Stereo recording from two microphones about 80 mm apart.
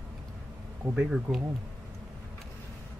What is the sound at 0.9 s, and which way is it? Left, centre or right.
Speech, centre.